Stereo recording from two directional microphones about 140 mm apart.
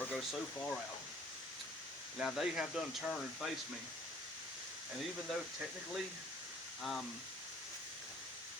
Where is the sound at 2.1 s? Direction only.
Centre (ahead or behind).